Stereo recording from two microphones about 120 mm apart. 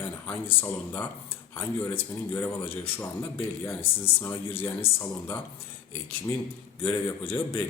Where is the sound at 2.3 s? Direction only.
20° left (ahead or behind).